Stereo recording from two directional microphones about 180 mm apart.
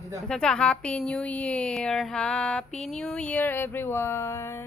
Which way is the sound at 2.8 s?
5° left (ahead or behind).